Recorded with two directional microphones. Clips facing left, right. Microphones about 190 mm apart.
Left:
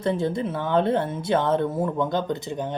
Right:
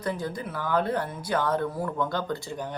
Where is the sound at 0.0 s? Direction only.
25° left (ahead or behind).